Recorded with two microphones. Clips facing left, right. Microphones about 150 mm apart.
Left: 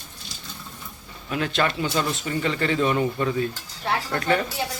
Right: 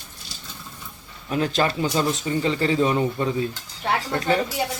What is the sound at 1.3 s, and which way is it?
A man's voice, 35° right (ahead or behind).